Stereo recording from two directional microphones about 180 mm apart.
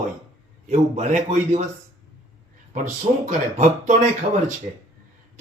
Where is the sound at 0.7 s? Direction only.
40° right (ahead or behind).